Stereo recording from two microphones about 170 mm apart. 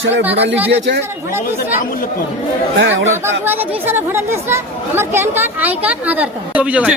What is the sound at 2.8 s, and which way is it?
Speech, 90° right.